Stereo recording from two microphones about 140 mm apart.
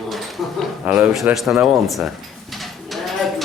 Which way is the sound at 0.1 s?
Centre (ahead or behind).